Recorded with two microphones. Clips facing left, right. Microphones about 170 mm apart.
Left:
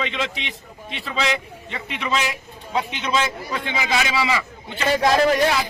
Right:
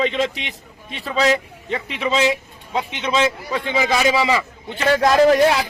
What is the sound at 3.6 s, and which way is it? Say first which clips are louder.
Speech: right 6 dB; 40° right (ahead or behind).